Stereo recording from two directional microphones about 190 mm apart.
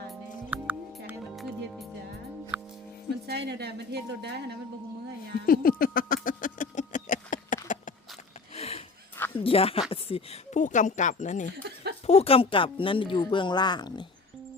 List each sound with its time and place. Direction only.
0.1 s music: 5° right (ahead or behind)
3.2 s a woman's voice: 60° right (ahead or behind)
5.5 s speech: 50° left (ahead or behind)
6.2 s a sound: 45° left (ahead or behind)
9.4 s a woman's voice: 30° left (ahead or behind)
11.5 s chuckle: 60° right (ahead or behind)
12.0 s speech: 30° left (ahead or behind)